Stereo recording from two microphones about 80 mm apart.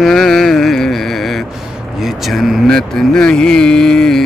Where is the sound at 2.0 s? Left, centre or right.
Centre.